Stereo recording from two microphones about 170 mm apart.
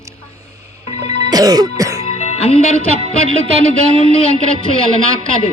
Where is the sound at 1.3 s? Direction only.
20° right (ahead or behind).